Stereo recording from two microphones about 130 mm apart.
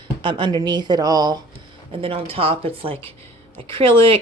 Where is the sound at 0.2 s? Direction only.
40° right (ahead or behind).